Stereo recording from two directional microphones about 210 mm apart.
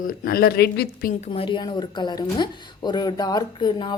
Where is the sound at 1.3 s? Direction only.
25° left (ahead or behind).